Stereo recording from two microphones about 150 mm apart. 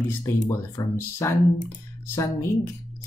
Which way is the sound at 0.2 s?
20° left (ahead or behind).